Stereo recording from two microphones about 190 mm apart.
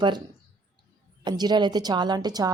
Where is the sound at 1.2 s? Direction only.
20° right (ahead or behind).